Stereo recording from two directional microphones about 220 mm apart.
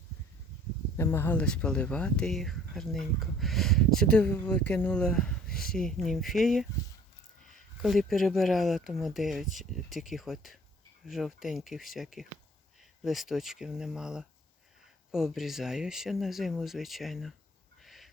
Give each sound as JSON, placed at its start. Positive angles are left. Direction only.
{"t": 0.9, "sound": "speech", "side_deg": 10}
{"t": 5.5, "sound": "a sound", "side_deg": 40}
{"t": 5.7, "sound": "speech", "side_deg": 0}
{"t": 7.8, "sound": "speech", "side_deg": 0}
{"t": 17.8, "sound": "owl", "side_deg": 0}